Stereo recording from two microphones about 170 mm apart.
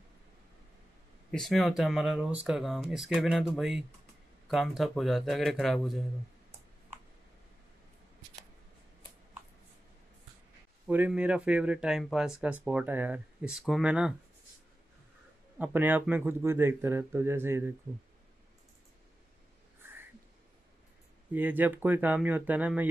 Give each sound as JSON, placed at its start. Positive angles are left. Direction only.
{"t": 1.3, "sound": "a man's voice", "side_deg": 0}
{"t": 10.9, "sound": "speech", "side_deg": -10}
{"t": 15.6, "sound": "speech", "side_deg": -10}
{"t": 21.3, "sound": "speech", "side_deg": -10}